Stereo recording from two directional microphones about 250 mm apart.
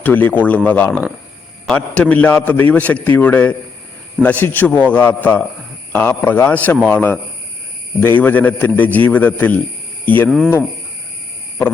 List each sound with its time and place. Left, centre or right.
0.0 s a man's voice: centre